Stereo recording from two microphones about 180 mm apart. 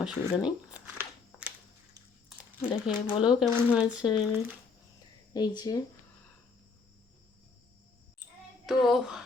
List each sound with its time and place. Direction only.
0.0 s a sound: 5° right (ahead or behind)
2.8 s speech: 5° right (ahead or behind)
5.3 s speech: 20° left (ahead or behind)
8.6 s speech: centre (ahead or behind)